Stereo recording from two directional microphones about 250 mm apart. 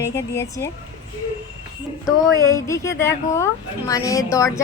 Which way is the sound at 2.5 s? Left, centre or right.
Centre.